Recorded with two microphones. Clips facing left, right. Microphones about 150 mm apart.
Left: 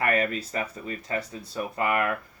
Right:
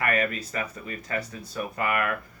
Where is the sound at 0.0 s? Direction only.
30° left (ahead or behind).